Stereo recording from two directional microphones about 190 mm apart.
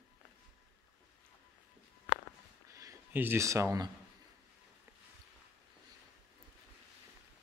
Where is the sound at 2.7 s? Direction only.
15° right (ahead or behind).